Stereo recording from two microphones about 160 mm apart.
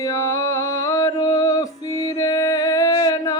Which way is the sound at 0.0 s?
20° left (ahead or behind).